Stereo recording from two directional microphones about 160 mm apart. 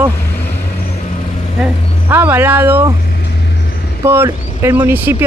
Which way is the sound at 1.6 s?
10° right (ahead or behind).